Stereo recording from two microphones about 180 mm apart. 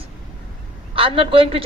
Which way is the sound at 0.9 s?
30° right (ahead or behind).